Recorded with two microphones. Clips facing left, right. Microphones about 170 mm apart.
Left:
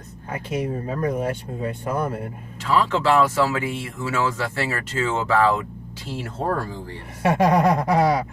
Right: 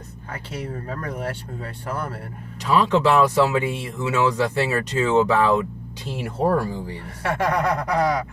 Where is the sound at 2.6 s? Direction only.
20° right (ahead or behind).